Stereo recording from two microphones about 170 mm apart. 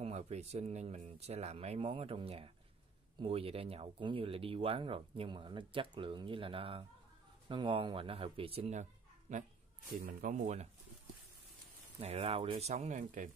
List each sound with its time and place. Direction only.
0.0 s a man's voice: 40° right (ahead or behind)
10.4 s speech: 40° right (ahead or behind)
12.0 s speech: 35° right (ahead or behind)